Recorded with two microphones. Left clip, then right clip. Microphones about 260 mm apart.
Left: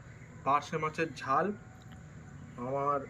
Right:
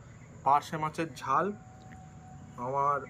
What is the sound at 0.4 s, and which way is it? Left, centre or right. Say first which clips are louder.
Speech: right 3 dB; centre.